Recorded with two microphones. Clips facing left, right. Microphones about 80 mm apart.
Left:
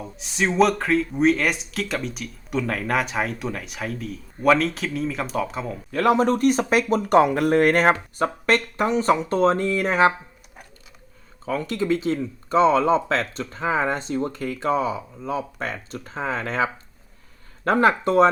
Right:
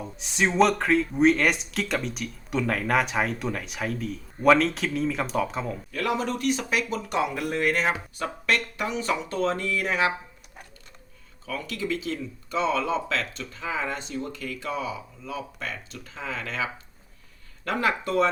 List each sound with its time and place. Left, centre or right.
0.0 s speech: centre
5.9 s speech: left
11.4 s speech: left
17.7 s speech: left